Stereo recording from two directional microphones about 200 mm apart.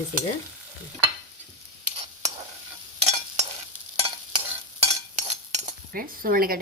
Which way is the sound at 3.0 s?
35° right (ahead or behind).